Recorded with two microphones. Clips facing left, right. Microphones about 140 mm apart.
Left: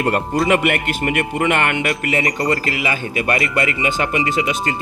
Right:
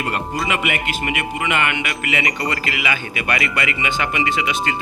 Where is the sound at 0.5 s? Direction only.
50° left (ahead or behind).